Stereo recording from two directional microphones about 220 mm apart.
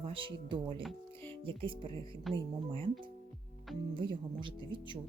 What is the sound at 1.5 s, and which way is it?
Speech, 25° right (ahead or behind).